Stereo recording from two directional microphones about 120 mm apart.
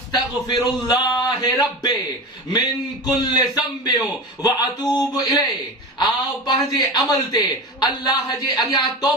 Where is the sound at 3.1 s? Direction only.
35° left (ahead or behind).